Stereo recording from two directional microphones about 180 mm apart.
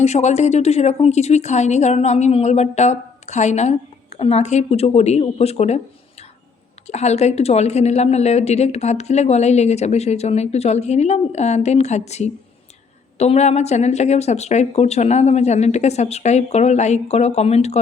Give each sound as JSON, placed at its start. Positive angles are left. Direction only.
{"t": 0.0, "sound": "a woman's voice", "side_deg": 40}
{"t": 6.8, "sound": "a woman's voice", "side_deg": 40}